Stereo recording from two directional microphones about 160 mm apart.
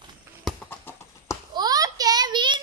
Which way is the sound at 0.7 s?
15° left (ahead or behind).